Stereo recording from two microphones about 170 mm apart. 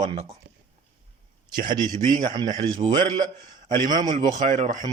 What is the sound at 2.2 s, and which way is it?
Speech, 25° right (ahead or behind).